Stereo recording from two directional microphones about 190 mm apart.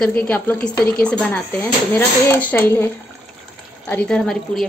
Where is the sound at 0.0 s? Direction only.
10° left (ahead or behind).